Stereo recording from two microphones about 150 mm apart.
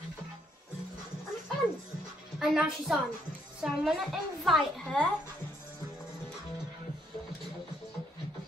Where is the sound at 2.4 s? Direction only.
5° right (ahead or behind).